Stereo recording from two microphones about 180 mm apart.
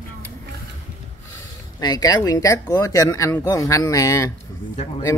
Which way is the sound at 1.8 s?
20° left (ahead or behind).